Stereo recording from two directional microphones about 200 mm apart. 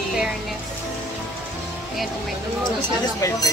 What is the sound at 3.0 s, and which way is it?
Speech, 15° left (ahead or behind).